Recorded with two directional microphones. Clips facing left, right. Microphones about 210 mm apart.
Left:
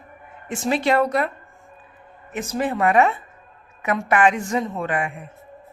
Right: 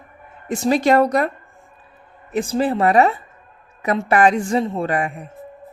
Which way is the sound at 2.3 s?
30° right (ahead or behind).